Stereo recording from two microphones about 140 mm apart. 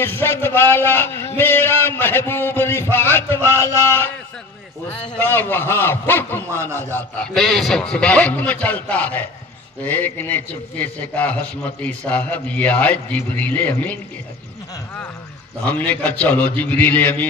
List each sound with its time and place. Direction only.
0.0 s a man's voice: 15° left (ahead or behind)
5.2 s a man's voice: 15° left (ahead or behind)
6.5 s a man's voice: 20° right (ahead or behind)
7.2 s a man's voice: 5° left (ahead or behind)
15.6 s a man's voice: 10° left (ahead or behind)